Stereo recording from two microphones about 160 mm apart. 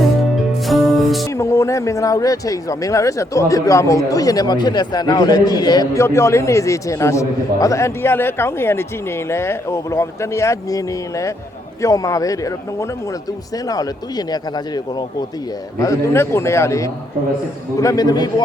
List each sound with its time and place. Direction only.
0.7 s music: centre (ahead or behind)
1.2 s a man's voice: 15° left (ahead or behind)